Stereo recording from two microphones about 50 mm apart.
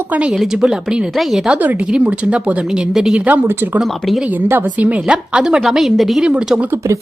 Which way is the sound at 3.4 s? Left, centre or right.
Right.